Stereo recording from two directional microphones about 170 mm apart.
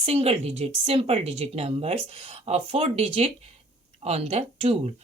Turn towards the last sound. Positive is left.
turn(degrees=-35)  # may be behind; listen again after turning